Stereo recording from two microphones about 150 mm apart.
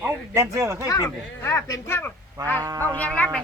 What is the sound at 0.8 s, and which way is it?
Speech, 25° left (ahead or behind).